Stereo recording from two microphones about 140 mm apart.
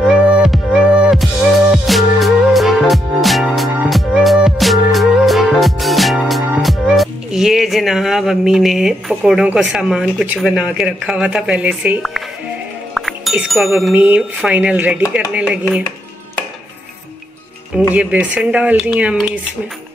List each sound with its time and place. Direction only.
0.0 s music: centre (ahead or behind)
13.9 s speech: 10° right (ahead or behind)
17.9 s speech: 10° right (ahead or behind)